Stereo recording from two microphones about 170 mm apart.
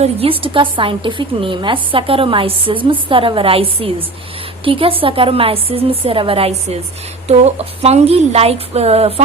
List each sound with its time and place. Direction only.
0.0 s a woman's voice: 35° right (ahead or behind)